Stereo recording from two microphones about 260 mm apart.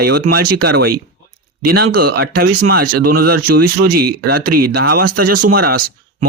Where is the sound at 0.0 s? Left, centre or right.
Right.